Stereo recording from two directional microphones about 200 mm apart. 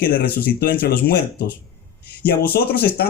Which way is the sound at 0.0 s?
50° left (ahead or behind).